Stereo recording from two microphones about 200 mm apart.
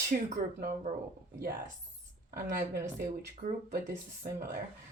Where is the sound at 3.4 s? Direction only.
40° right (ahead or behind).